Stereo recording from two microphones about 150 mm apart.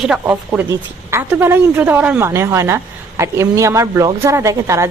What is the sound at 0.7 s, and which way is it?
Speech, 15° right (ahead or behind).